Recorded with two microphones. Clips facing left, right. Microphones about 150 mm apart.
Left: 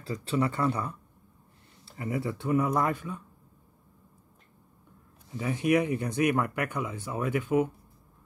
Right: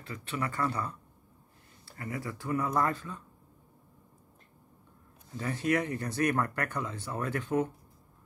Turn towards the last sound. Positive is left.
turn(degrees=10)  # may be behind; listen again after turning